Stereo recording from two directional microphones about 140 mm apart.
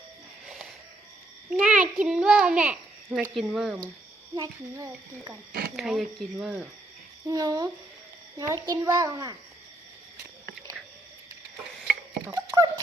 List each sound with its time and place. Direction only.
0.4 s a sound: centre (ahead or behind)
1.5 s a child's voice: 10° right (ahead or behind)
4.4 s a child's voice: 25° right (ahead or behind)
5.7 s speech: centre (ahead or behind)
7.3 s a child's voice: 25° right (ahead or behind)
12.3 s a child's voice: 25° right (ahead or behind)